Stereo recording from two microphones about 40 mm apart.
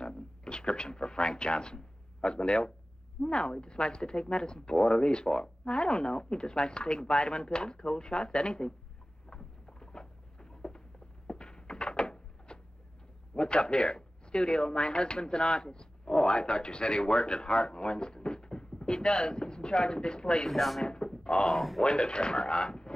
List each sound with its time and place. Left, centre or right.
0.0 s speech: left
9.3 s a sound: left
13.3 s speech: left
20.4 s speech: centre
20.8 s a sound: left
21.5 s speech: centre
21.8 s speech: left